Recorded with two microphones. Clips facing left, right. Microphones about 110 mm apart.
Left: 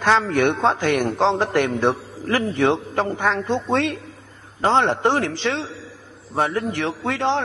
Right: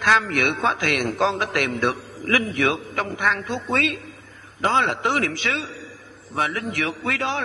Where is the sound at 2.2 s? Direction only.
15° left (ahead or behind).